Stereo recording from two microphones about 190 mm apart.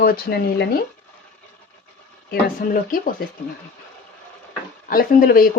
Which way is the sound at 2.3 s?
45° left (ahead or behind).